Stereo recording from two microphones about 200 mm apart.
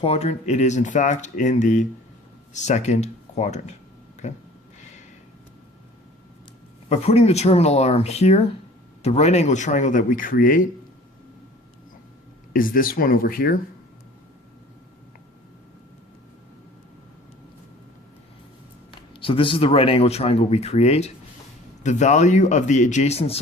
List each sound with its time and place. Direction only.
0.0 s speech: 30° left (ahead or behind)
6.8 s speech: 30° left (ahead or behind)
12.5 s speech: 45° left (ahead or behind)
18.9 s speech: 25° left (ahead or behind)